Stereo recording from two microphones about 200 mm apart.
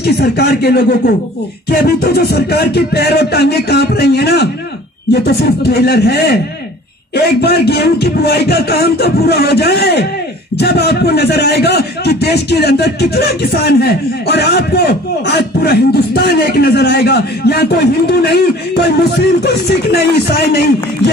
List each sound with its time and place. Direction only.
0.0 s a man's voice: 55° left (ahead or behind)